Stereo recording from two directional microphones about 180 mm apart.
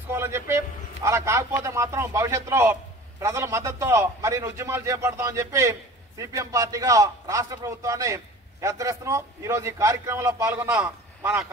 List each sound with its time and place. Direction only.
0.1 s a man's voice: 15° right (ahead or behind)